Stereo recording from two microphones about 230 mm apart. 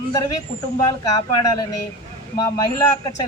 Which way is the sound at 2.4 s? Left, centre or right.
Centre.